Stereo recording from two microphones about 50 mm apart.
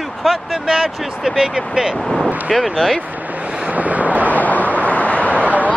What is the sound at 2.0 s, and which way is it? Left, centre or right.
Speech, centre.